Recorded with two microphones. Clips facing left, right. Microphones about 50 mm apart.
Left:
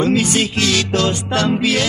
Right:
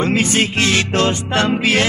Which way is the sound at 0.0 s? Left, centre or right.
Right.